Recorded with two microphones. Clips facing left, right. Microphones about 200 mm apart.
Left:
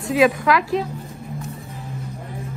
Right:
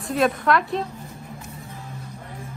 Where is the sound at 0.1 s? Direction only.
Centre (ahead or behind).